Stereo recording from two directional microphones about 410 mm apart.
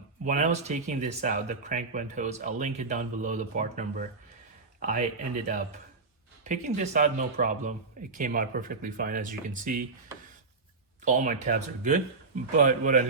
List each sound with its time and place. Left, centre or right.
0.3 s speech: centre
11.0 s speech: centre